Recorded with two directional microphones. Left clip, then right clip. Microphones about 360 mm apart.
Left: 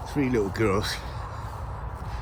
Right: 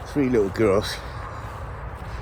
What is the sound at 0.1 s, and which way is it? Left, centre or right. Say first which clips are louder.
Speech: right 5 dB; centre.